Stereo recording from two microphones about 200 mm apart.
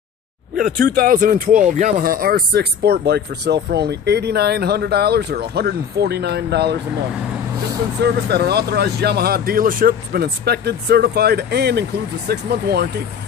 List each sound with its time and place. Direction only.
0.6 s speech: 45° right (ahead or behind)
8.0 s speech: 55° right (ahead or behind)